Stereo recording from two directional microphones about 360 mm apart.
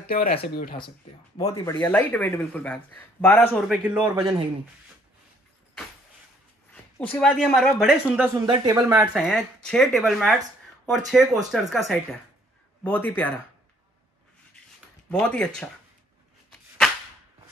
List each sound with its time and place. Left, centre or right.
0.0 s speech: left; by 4.4 s centre
6.7 s speech: centre
12.8 s speech: centre
15.0 s speech: centre